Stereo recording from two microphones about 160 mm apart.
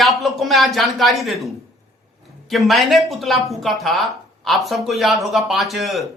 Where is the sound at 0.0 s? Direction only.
Centre (ahead or behind).